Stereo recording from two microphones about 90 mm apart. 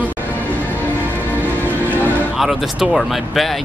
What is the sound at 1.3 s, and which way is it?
Music, 20° left (ahead or behind).